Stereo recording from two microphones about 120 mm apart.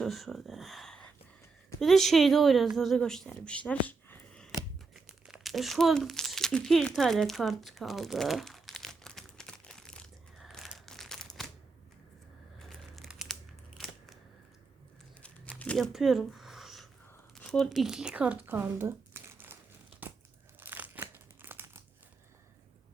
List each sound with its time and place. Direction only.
0.0 s a woman's voice: centre (ahead or behind)
4.9 s crumpling: 5° right (ahead or behind)
12.6 s crumpling: centre (ahead or behind)
13.7 s scissors: centre (ahead or behind)
15.2 s crumpling: 10° left (ahead or behind)
15.9 s a sound: centre (ahead or behind)
17.3 s speech: 5° left (ahead or behind); by 19.5 s 20° right (ahead or behind)
20.6 s crumpling: 15° right (ahead or behind)